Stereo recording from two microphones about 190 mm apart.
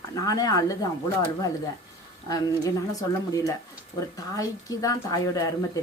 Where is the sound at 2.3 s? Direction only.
20° left (ahead or behind).